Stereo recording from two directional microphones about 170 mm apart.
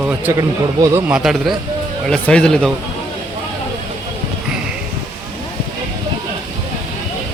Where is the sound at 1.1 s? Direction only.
Centre (ahead or behind).